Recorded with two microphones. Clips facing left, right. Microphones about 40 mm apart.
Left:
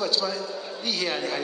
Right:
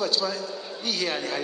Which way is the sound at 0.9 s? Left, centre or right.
Centre.